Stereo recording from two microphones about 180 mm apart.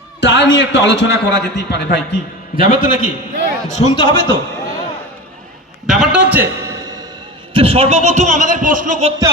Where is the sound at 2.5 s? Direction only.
50° left (ahead or behind).